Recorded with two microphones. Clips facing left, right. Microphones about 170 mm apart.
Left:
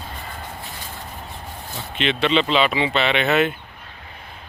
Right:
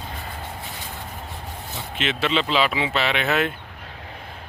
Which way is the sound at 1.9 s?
5° right (ahead or behind).